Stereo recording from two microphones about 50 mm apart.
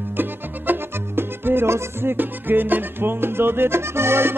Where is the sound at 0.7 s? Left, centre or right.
Right.